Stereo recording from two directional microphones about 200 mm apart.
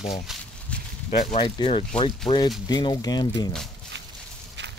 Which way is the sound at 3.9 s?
65° right (ahead or behind).